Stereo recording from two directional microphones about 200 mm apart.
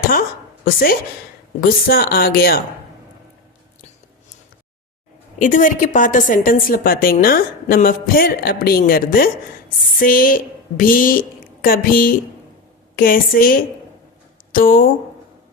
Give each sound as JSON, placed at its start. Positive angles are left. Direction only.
{"t": 0.1, "sound": "a sound", "side_deg": 45}
{"t": 1.9, "sound": "a woman's voice", "side_deg": 50}
{"t": 5.4, "sound": "a woman's voice", "side_deg": 40}